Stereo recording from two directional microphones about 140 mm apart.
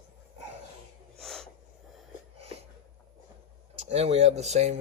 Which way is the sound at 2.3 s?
45° right (ahead or behind).